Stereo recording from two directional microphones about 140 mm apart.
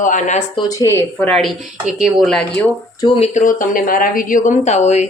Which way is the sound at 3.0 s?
40° left (ahead or behind).